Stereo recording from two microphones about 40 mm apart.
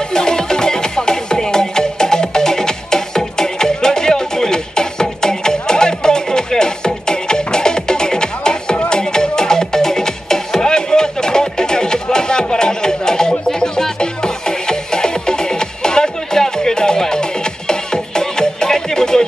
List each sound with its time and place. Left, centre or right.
0.1 s music: centre